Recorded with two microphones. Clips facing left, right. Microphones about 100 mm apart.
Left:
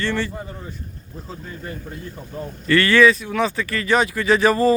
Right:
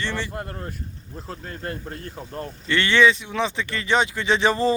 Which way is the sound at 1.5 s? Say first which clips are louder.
Right 2 dB; 70° right (ahead or behind).